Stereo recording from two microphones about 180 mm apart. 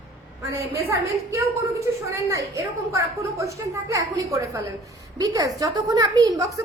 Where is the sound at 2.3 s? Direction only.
15° right (ahead or behind).